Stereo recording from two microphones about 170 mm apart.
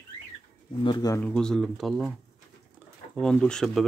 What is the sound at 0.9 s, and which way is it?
Speech, 20° left (ahead or behind).